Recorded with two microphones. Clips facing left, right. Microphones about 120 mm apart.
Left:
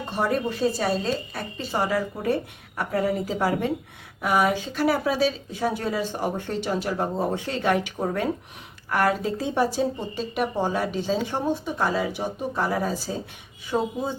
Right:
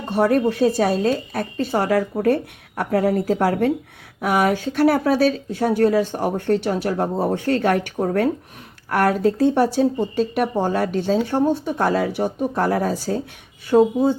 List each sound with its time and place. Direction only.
0.1 s speech: 55° right (ahead or behind); by 1.6 s 75° right (ahead or behind)
1.7 s speech: 65° right (ahead or behind)
3.2 s speech: 60° right (ahead or behind)
4.9 s speech: 50° right (ahead or behind)
13.7 s speech: 45° right (ahead or behind)